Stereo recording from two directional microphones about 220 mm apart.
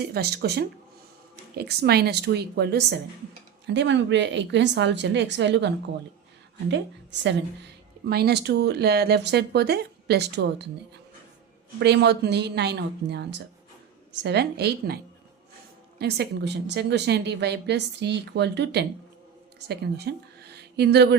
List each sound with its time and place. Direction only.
0.0 s a woman's voice: 45° right (ahead or behind)
11.8 s a woman's voice: 50° right (ahead or behind)